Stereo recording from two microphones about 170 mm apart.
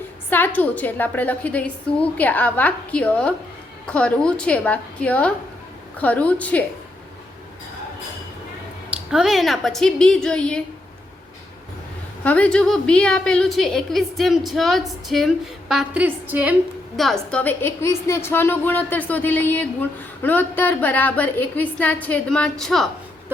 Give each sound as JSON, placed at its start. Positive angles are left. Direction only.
{"t": 0.3, "sound": "a woman's voice", "side_deg": 10}
{"t": 9.0, "sound": "a woman's voice", "side_deg": 0}
{"t": 12.2, "sound": "a woman's voice", "side_deg": 10}
{"t": 17.0, "sound": "a woman's voice", "side_deg": 0}